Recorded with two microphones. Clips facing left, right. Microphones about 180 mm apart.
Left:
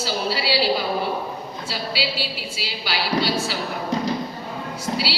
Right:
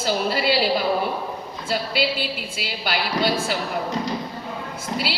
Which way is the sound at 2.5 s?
50° right (ahead or behind).